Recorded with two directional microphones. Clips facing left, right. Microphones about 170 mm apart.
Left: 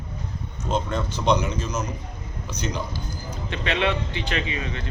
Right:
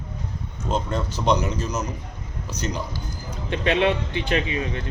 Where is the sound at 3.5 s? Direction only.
45° right (ahead or behind).